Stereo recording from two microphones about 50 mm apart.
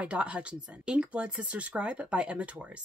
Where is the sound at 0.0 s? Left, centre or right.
Right.